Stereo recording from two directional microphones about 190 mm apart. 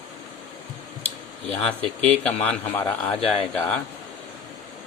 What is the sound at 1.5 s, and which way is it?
A man's voice, 5° left (ahead or behind).